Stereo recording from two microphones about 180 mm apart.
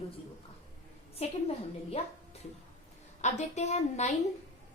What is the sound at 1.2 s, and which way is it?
Speech, 35° left (ahead or behind).